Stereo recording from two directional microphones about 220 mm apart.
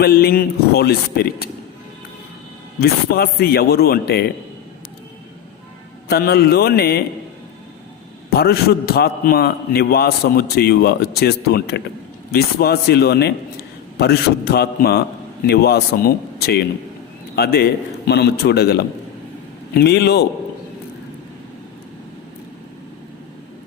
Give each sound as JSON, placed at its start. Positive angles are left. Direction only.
{"t": 0.0, "sound": "a man's voice", "side_deg": 45}
{"t": 2.8, "sound": "a man's voice", "side_deg": 45}
{"t": 6.1, "sound": "a man's voice", "side_deg": 45}
{"t": 8.3, "sound": "a man's voice", "side_deg": 45}